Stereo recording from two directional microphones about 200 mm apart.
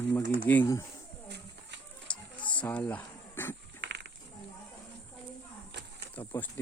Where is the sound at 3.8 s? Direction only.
55° right (ahead or behind).